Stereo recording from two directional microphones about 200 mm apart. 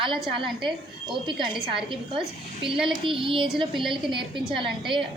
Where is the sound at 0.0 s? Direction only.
25° right (ahead or behind).